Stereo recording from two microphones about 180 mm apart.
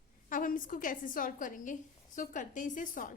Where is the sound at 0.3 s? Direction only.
50° left (ahead or behind).